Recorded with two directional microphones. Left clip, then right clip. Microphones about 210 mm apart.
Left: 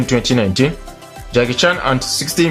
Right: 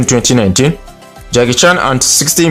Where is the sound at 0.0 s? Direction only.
45° right (ahead or behind).